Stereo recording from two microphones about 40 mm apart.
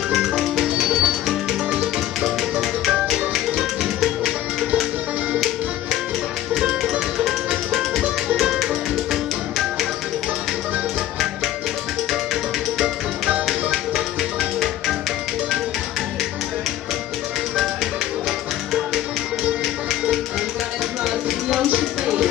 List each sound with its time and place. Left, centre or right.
0.1 s music: centre
0.8 s music: centre
3.1 s music: centre
6.8 s music: centre
9.1 s tap: centre
13.5 s music: centre
21.0 s music: centre